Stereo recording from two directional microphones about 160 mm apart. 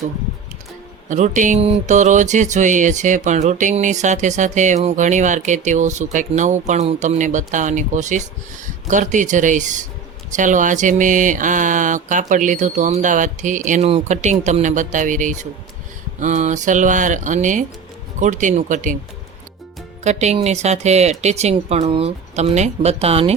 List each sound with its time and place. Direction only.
1.1 s speech: 50° right (ahead or behind)
13.8 s speech: 40° right (ahead or behind)
20.1 s speech: 45° right (ahead or behind)